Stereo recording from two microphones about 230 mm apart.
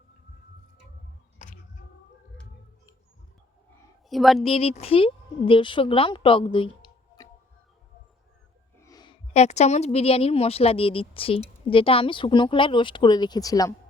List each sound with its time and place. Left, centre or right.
4.1 s speech: centre
4.4 s speech: left
8.8 s a woman's voice: centre